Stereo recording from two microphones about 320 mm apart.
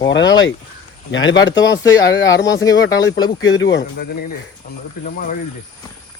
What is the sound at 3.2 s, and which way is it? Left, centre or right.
Speech, left.